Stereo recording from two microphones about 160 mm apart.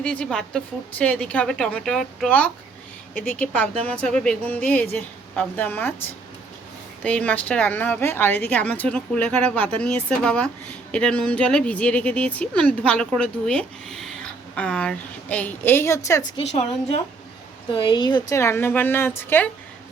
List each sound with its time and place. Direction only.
0.0 s speech: 5° left (ahead or behind)
7.0 s speech: 10° left (ahead or behind)
16.4 s a woman's voice: 40° left (ahead or behind)
17.7 s speech: 30° left (ahead or behind)